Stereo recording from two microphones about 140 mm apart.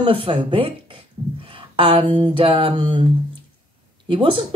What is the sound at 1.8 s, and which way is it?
A woman's voice, 40° right (ahead or behind).